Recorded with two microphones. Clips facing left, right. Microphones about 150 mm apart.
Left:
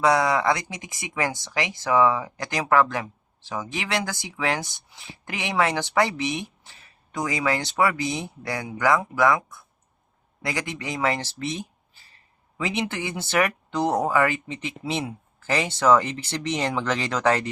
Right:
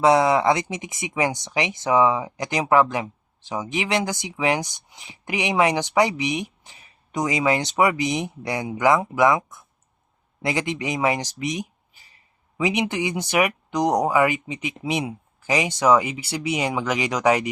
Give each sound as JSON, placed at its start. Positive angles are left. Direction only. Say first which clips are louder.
{"t": 0.0, "sound": "speech", "louder": "right 4 dB", "side_deg": -20}